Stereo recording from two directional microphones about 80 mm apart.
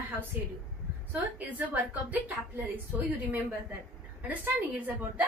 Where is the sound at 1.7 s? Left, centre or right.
Right.